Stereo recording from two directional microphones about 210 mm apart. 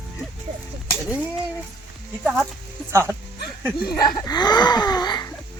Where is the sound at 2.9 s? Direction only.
10° right (ahead or behind).